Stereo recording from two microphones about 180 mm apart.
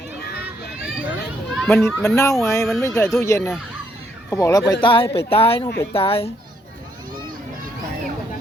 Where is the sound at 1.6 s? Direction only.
Centre (ahead or behind).